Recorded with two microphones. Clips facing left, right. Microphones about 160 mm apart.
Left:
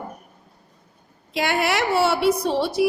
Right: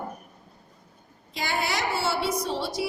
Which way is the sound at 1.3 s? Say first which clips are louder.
Left 7 dB; 65° left (ahead or behind).